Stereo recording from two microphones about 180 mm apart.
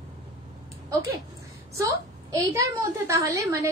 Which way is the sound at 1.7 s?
20° right (ahead or behind).